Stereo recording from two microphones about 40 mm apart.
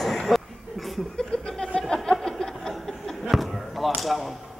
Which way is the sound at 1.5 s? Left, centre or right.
Centre.